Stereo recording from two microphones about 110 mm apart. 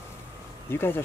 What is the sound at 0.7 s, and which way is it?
Speech, 20° left (ahead or behind).